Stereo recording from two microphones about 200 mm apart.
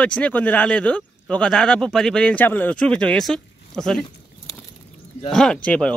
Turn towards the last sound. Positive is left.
turn(degrees=5)  # may be behind; listen again after turning